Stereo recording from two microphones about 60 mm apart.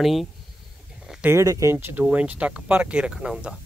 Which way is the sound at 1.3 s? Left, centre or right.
Right.